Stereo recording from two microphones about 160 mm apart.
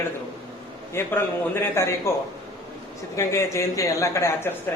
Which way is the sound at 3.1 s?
20° left (ahead or behind).